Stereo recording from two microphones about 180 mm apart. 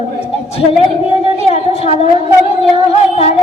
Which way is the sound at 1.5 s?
35° left (ahead or behind).